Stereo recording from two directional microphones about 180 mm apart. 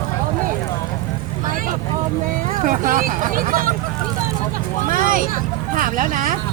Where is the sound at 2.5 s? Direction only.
50° right (ahead or behind).